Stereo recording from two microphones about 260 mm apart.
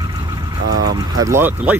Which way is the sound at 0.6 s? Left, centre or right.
Right.